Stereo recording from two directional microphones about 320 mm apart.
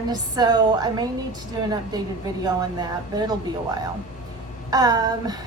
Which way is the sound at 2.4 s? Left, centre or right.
Centre.